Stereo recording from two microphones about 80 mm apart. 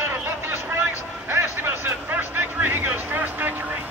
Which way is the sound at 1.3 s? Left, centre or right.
Right.